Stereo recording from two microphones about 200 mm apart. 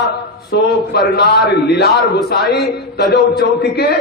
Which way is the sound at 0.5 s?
55° left (ahead or behind).